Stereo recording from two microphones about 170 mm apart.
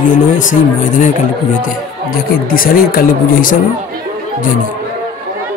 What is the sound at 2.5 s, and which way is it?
Speech, 60° left (ahead or behind).